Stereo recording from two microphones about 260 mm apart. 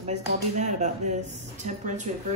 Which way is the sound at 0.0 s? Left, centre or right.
Right.